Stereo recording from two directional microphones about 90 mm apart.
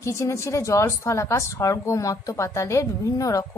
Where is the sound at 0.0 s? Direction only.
30° left (ahead or behind).